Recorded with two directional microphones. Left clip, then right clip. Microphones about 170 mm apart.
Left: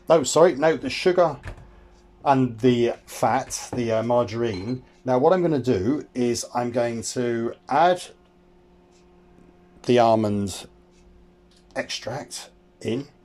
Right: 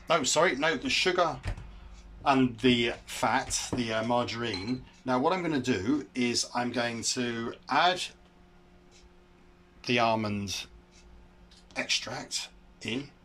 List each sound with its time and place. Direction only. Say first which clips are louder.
0.0 s speech: left 8 dB; 35° left (ahead or behind)
9.8 s speech: left 9 dB; 45° left (ahead or behind)
11.7 s speech: left 2 dB; 45° left (ahead or behind)